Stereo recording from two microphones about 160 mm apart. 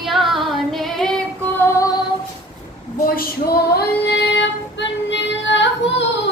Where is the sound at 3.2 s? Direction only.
70° left (ahead or behind); by 5.6 s 90° left.